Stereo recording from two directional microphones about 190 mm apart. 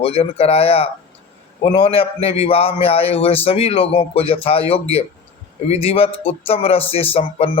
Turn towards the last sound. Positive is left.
turn(degrees=30)  # may be behind; listen again after turning